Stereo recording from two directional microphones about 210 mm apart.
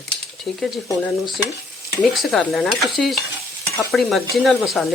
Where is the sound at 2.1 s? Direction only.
Centre (ahead or behind).